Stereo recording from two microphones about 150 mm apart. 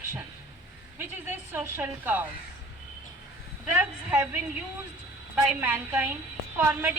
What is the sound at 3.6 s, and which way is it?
A woman's voice, 10° right (ahead or behind).